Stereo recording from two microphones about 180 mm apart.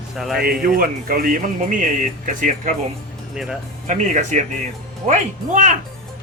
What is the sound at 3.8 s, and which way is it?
Speech, 40° right (ahead or behind).